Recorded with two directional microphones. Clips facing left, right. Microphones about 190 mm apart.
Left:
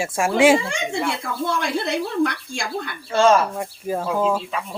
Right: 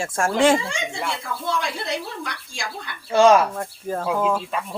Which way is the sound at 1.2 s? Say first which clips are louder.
Left 2 dB; 55° left (ahead or behind).